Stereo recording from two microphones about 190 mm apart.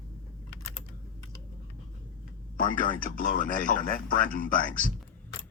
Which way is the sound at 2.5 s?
45° left (ahead or behind).